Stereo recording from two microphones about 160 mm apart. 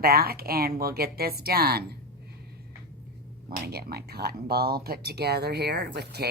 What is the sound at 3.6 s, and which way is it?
Speech, 85° right.